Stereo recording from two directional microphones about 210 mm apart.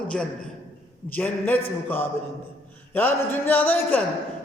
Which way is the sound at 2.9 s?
10° left (ahead or behind).